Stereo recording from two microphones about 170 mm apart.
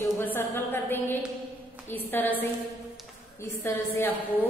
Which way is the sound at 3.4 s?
10° left (ahead or behind).